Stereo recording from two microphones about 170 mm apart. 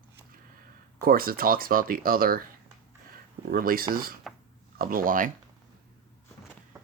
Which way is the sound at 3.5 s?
60° right (ahead or behind).